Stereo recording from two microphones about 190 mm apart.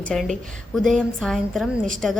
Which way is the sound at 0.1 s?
Centre (ahead or behind).